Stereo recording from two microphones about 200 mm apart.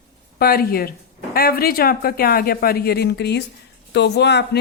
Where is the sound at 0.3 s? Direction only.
50° left (ahead or behind).